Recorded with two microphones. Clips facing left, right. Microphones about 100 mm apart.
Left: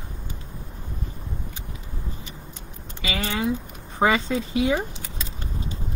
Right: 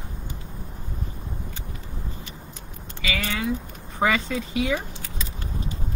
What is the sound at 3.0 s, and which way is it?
Speech, 20° left (ahead or behind).